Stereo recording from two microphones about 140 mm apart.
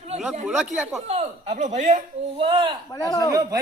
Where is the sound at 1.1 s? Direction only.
55° right (ahead or behind).